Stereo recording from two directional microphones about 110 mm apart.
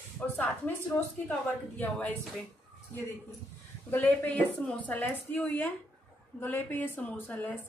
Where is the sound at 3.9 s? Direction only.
15° left (ahead or behind).